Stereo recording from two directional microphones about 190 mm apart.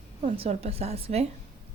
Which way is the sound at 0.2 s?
35° right (ahead or behind).